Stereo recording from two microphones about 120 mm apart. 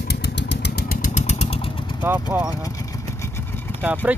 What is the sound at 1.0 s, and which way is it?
Vehicle, 85° left.